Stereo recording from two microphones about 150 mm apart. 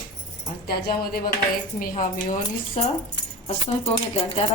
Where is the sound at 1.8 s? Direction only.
60° left (ahead or behind).